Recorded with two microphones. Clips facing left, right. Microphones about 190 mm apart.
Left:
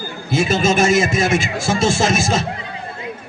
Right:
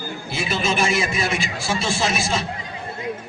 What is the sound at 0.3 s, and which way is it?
A man's voice, 45° left (ahead or behind).